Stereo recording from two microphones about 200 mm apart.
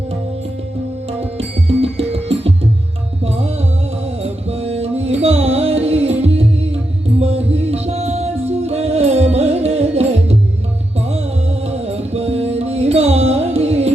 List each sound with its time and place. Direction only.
1.4 s music: 30° right (ahead or behind)
4.2 s music: 30° right (ahead or behind)
11.7 s music: 30° right (ahead or behind)